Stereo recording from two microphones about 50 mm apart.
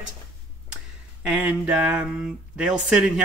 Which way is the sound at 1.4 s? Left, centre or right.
Right.